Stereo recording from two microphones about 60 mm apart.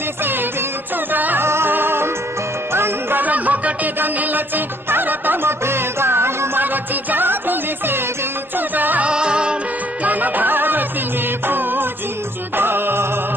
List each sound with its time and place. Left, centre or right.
0.2 s music: right
3.2 s music: right
9.1 s music: centre
10.0 s music: right